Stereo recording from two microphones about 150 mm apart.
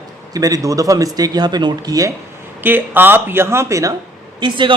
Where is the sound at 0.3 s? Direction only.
25° right (ahead or behind).